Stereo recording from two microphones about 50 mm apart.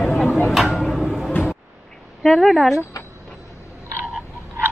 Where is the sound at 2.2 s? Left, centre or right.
Centre.